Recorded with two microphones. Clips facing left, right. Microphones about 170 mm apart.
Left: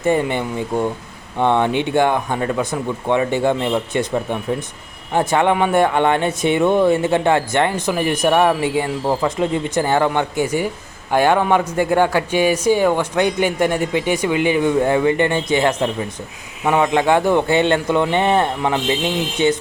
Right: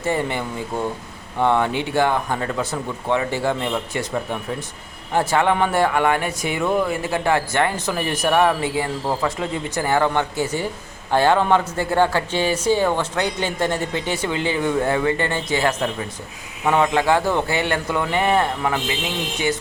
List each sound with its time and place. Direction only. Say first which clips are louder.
0.0 s speech: left 5 dB; 20° left (ahead or behind)